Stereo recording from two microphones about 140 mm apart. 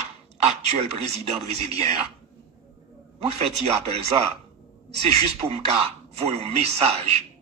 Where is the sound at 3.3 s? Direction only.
45° right (ahead or behind).